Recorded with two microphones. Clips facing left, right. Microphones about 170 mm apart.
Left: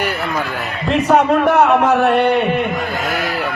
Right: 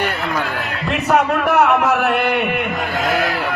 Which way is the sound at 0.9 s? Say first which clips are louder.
Left 4 dB; 30° left (ahead or behind).